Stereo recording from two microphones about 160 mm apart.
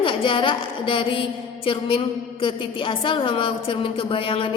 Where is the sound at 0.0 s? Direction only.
30° left (ahead or behind).